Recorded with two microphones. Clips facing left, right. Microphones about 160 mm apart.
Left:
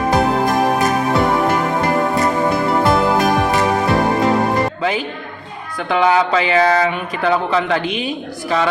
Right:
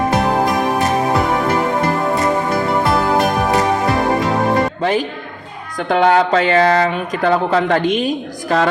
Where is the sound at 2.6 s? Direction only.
Centre (ahead or behind).